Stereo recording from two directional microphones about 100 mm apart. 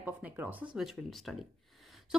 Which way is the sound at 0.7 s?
Centre (ahead or behind).